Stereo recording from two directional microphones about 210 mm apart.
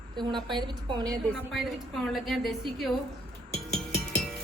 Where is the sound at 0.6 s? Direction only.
20° right (ahead or behind).